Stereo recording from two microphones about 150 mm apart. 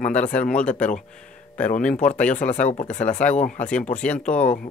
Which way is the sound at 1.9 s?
55° left (ahead or behind).